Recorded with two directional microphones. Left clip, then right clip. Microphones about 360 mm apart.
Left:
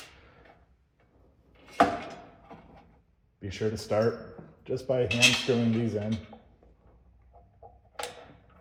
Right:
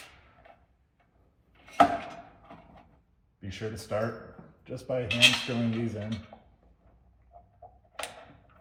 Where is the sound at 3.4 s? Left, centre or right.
Left.